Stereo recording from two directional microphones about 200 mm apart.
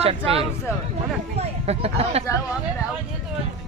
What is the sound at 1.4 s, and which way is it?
Speech, 30° right (ahead or behind).